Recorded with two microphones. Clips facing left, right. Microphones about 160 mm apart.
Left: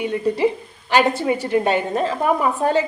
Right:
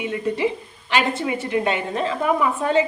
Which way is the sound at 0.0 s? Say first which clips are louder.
Left 3 dB; 35° left (ahead or behind).